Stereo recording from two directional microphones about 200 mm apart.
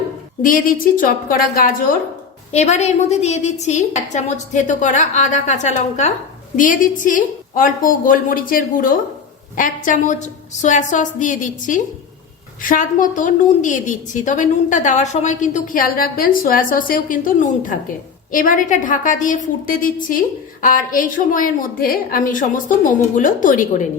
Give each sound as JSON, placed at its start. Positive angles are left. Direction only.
{"t": 0.4, "sound": "a woman's voice", "side_deg": 45}
{"t": 2.5, "sound": "a woman's voice", "side_deg": 35}